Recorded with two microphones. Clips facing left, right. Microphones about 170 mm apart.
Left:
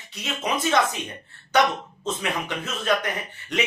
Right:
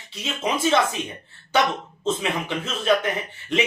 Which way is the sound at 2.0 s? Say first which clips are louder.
Right 4 dB; 25° right (ahead or behind).